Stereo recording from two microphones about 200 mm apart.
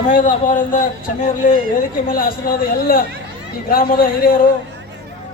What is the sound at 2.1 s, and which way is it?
Speech, 45° left (ahead or behind).